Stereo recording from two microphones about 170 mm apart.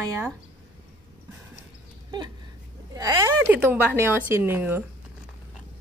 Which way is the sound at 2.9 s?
20° right (ahead or behind).